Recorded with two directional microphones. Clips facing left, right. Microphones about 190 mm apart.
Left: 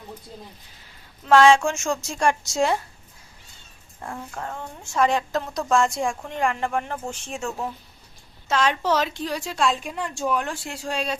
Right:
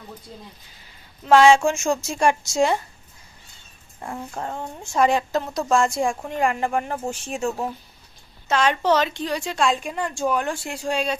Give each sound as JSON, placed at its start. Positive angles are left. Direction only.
{"t": 1.6, "sound": "a woman's voice", "side_deg": -5}
{"t": 4.0, "sound": "a woman's voice", "side_deg": -5}
{"t": 4.4, "sound": "speech", "side_deg": -25}
{"t": 5.0, "sound": "a woman's voice", "side_deg": -5}